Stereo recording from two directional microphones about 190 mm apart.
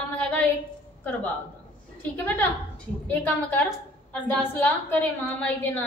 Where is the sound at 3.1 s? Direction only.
10° left (ahead or behind).